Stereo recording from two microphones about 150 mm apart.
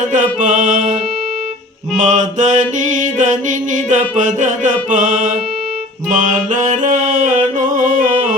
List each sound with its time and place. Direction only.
0.1 s mantra: 60° right (ahead or behind)
2.0 s mantra: 55° right (ahead or behind)
6.1 s music: 55° right (ahead or behind)